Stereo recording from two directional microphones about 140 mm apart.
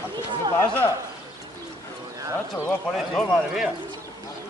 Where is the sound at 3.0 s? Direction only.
Centre (ahead or behind).